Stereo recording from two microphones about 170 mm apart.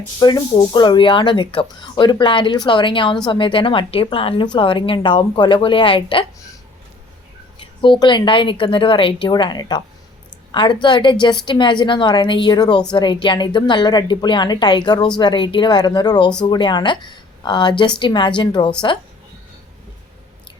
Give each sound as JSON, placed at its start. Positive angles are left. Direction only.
{"t": 0.2, "sound": "speech", "side_deg": 25}
{"t": 7.6, "sound": "speech", "side_deg": 30}